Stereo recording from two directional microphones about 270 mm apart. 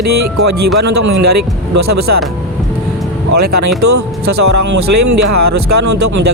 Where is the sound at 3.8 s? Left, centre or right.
Right.